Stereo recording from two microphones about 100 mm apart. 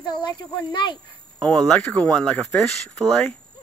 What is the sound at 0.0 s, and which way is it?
Speech, 50° left (ahead or behind).